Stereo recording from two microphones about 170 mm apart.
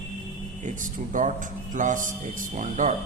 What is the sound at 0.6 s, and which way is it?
A man's voice, 50° right (ahead or behind).